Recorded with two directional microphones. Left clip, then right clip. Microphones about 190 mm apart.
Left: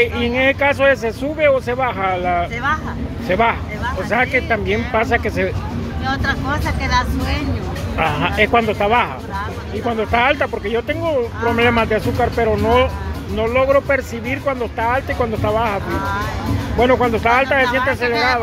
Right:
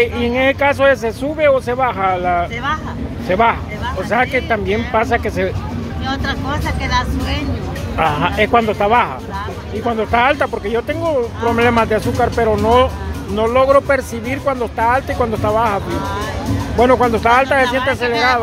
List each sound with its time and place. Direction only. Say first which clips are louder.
0.0 s speech: right 1 dB; 5° right (ahead or behind)